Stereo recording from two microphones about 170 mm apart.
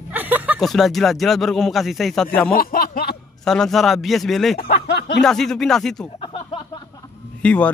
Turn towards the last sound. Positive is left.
turn(degrees=10)  # may be behind; listen again after turning